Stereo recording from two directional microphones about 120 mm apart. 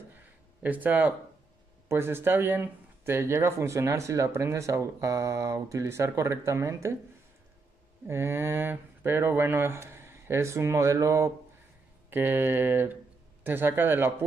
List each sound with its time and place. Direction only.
0.6 s speech: 15° right (ahead or behind)
8.1 s speech: 20° right (ahead or behind)